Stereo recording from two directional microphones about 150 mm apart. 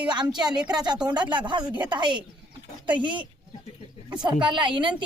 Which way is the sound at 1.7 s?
10° right (ahead or behind).